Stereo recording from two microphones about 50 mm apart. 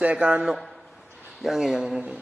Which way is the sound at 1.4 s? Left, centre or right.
Centre.